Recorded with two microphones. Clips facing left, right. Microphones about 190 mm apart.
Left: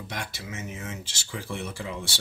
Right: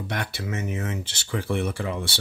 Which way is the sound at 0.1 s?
60° right (ahead or behind).